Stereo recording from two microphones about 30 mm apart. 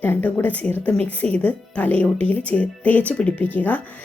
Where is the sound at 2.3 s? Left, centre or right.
Left.